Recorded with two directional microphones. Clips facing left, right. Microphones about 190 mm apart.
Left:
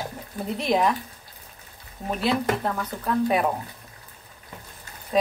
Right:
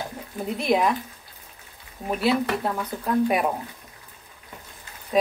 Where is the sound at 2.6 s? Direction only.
15° right (ahead or behind).